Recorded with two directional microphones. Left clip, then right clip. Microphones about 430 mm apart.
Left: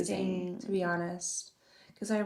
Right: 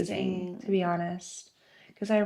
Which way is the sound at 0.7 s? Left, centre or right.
Right.